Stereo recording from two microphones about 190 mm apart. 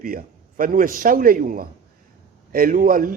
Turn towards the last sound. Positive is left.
turn(degrees=-45)  # may be behind; listen again after turning